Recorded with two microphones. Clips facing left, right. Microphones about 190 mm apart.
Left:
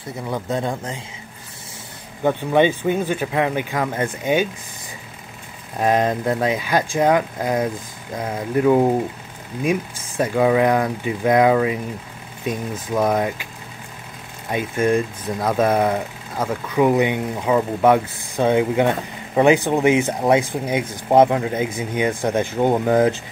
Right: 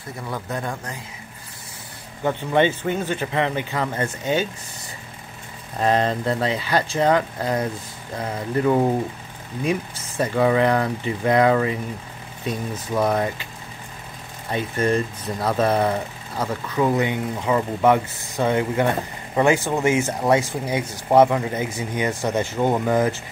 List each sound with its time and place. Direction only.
0.3 s speech: 20° left (ahead or behind)
2.2 s speech: 15° left (ahead or behind)
5.8 s speech: 10° left (ahead or behind)
14.5 s speech: 10° left (ahead or behind)